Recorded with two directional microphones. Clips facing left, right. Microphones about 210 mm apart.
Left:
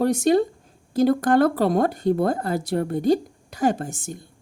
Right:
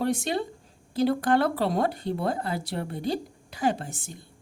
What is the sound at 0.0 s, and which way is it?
Speech, 45° left (ahead or behind).